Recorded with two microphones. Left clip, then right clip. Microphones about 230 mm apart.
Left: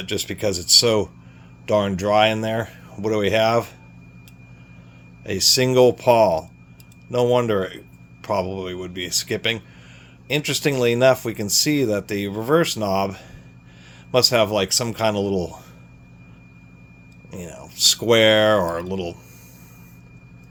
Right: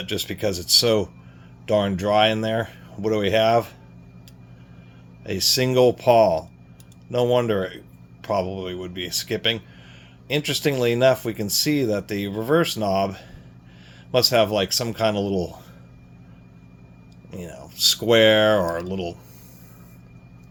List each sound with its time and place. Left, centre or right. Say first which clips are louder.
0.0 s speech: left 1 dB; centre
5.2 s speech: left 3 dB; centre
17.3 s speech: left 2 dB; centre